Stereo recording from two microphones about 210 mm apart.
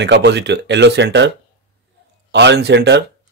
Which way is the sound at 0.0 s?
55° right (ahead or behind).